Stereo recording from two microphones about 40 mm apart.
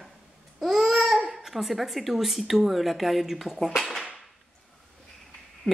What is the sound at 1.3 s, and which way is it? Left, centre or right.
A woman's voice, centre.